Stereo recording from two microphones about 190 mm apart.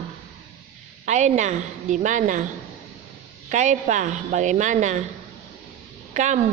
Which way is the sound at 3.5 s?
40° right (ahead or behind).